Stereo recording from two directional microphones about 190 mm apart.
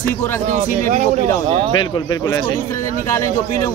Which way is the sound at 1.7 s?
25° left (ahead or behind).